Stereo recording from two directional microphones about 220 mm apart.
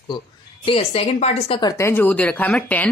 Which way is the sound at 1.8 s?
10° left (ahead or behind).